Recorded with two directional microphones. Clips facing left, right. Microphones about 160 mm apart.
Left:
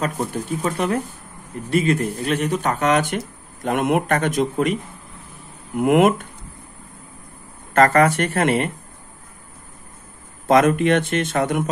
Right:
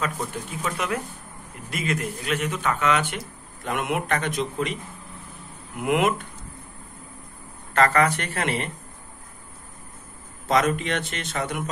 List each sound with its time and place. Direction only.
0.0 s speech: 35° left (ahead or behind)
5.8 s speech: 45° left (ahead or behind)
7.7 s speech: 45° left (ahead or behind)
10.5 s speech: 50° left (ahead or behind)